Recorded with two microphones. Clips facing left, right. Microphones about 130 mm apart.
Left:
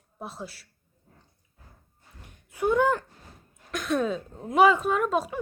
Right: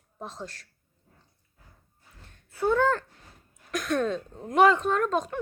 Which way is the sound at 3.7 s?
Centre (ahead or behind).